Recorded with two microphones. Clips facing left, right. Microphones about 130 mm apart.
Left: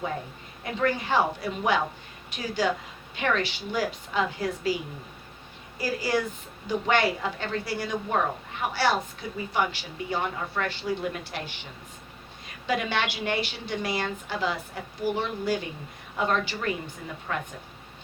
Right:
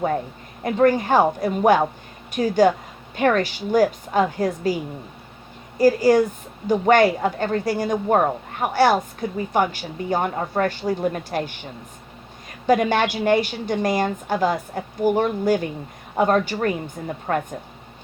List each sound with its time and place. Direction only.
0.6 s speech: 45° right (ahead or behind)